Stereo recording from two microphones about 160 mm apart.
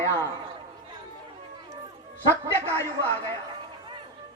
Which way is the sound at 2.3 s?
15° left (ahead or behind).